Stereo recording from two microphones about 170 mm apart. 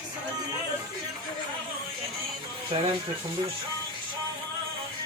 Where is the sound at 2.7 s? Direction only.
30° right (ahead or behind).